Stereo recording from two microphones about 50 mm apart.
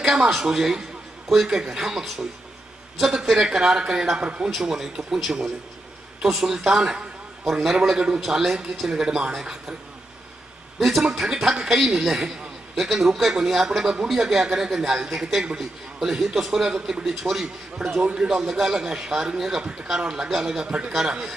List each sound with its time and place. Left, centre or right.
0.0 s a man's voice: centre
4.5 s a man's voice: centre
10.8 s speech: centre
11.1 s a man's voice: centre
18.0 s a man's voice: centre